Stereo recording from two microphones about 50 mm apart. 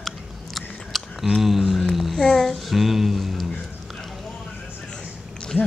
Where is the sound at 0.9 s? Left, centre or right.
Centre.